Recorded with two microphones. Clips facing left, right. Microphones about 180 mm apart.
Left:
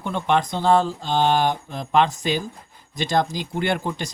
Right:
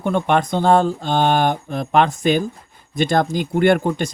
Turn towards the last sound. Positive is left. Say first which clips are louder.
# right 8 dB
turn(degrees=-50)  # may be behind; listen again after turning